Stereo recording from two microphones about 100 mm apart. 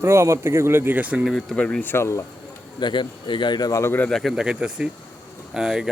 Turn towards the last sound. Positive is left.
turn(degrees=-5)  # may be behind; listen again after turning